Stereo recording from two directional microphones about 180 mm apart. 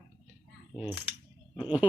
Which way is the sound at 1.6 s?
25° left (ahead or behind).